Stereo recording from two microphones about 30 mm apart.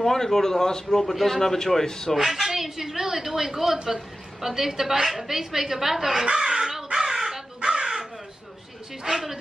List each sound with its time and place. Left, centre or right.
0.0 s a man's voice: centre
2.1 s a woman's voice: centre
3.8 s a sound: right
4.5 s a woman's voice: centre
6.3 s crow: right
9.0 s a woman's voice: centre